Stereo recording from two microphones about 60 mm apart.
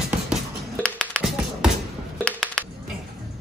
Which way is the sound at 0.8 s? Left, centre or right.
Centre.